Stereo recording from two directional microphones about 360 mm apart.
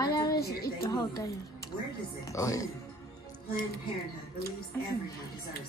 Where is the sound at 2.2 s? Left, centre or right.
Centre.